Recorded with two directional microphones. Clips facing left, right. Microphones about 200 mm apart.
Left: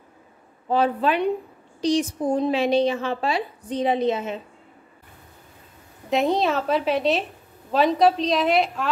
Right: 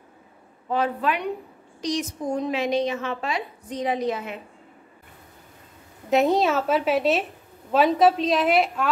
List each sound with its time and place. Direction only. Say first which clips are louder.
0.7 s a woman's voice: left 3 dB; 30° left (ahead or behind)
6.0 s a woman's voice: right 1 dB; centre (ahead or behind)